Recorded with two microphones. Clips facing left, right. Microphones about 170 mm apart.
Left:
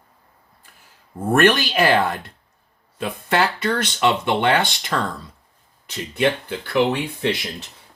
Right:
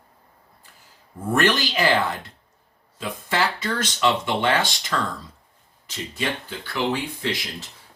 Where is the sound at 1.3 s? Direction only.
60° left (ahead or behind).